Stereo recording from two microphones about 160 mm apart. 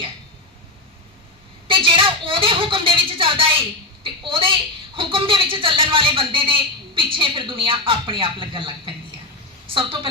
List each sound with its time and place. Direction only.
1.6 s a woman's voice: 35° right (ahead or behind)
4.0 s a sound: 35° right (ahead or behind)
4.9 s a woman's voice: 35° right (ahead or behind)